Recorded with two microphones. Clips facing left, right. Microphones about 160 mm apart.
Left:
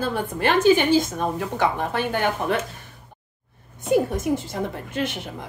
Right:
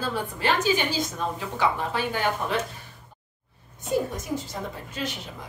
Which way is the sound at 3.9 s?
55° left (ahead or behind).